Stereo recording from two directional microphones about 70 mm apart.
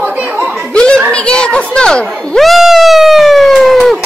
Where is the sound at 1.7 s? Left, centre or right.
Centre.